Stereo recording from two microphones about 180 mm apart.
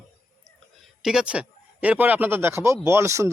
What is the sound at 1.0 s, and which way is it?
A man's voice, 5° right (ahead or behind).